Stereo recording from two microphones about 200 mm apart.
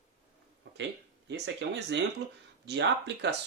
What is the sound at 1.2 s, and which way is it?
Speech, 60° right (ahead or behind).